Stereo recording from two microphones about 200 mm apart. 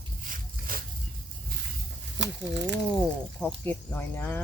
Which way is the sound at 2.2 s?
65° right (ahead or behind).